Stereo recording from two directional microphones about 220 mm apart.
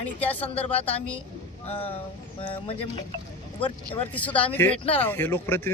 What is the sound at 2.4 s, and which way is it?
Speech, 25° left (ahead or behind).